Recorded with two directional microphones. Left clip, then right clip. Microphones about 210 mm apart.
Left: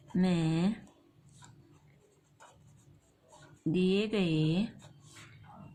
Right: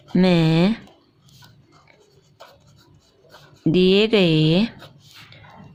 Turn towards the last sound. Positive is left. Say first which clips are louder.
# right 14 dB
turn(degrees=-50)  # may be behind; listen again after turning